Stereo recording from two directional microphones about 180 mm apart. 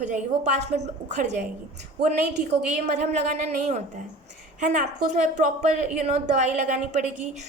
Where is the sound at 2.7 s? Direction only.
40° right (ahead or behind).